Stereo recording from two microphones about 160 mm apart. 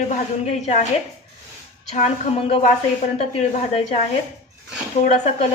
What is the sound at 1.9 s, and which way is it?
A woman's voice, 45° left (ahead or behind).